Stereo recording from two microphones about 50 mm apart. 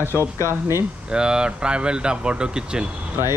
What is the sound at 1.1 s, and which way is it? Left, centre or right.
Speech, centre.